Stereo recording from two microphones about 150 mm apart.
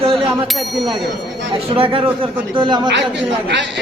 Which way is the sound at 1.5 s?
35° right (ahead or behind).